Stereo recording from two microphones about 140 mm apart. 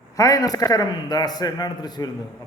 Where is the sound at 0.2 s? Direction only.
25° left (ahead or behind).